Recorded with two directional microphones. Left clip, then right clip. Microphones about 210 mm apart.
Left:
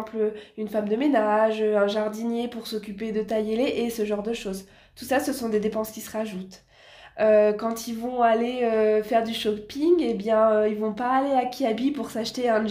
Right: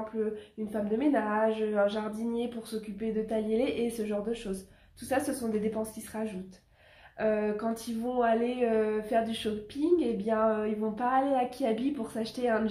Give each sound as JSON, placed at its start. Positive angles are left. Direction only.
{"t": 0.6, "sound": "a woman's voice", "side_deg": 35}